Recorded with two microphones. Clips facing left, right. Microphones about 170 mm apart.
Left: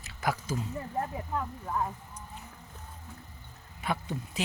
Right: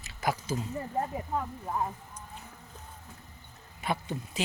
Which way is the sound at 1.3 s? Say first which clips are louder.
Even; 20° right (ahead or behind).